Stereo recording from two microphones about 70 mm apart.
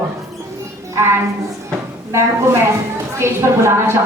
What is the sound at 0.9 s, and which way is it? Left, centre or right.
A woman's voice, right.